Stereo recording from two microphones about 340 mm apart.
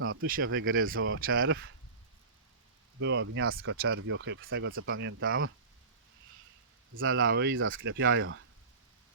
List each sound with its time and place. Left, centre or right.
0.0 s speech: right
3.0 s speech: right
6.9 s speech: right